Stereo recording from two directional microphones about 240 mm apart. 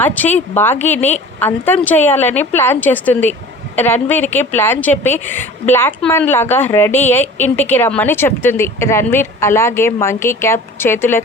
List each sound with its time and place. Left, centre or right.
0.0 s speech: centre